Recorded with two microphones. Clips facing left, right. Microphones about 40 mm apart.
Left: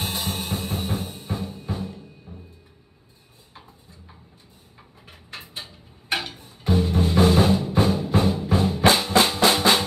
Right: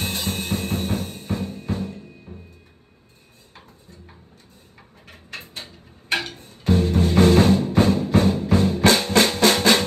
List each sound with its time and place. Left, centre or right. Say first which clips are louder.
0.0 s music: right 2 dB; right
2.3 s music: right 2 dB; right
5.3 s a sound: right 1 dB; right
6.3 s music: right 2 dB; right